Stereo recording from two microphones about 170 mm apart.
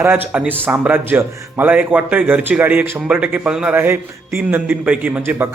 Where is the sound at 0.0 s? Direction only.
10° right (ahead or behind).